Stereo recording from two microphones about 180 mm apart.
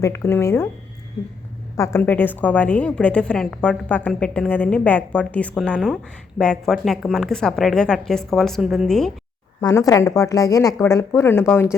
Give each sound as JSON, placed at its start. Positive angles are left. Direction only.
{"t": 0.0, "sound": "a woman's voice", "side_deg": 15}
{"t": 1.7, "sound": "a woman's voice", "side_deg": 15}
{"t": 9.6, "sound": "a woman's voice", "side_deg": 20}